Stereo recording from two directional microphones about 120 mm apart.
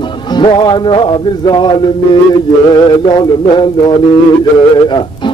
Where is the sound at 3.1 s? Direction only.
40° left (ahead or behind).